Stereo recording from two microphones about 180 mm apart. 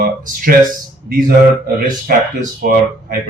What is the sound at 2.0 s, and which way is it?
Speech, 55° right (ahead or behind).